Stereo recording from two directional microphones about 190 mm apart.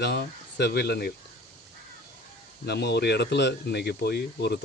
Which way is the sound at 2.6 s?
60° left (ahead or behind).